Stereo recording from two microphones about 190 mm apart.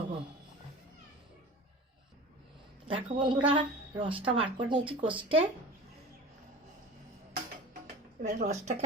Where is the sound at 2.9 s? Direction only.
25° right (ahead or behind).